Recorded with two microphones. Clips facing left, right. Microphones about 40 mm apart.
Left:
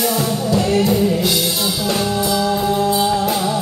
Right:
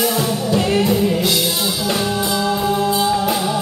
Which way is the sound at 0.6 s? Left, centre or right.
Right.